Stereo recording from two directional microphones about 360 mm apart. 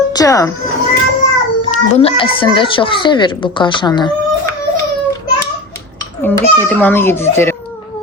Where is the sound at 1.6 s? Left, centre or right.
Centre.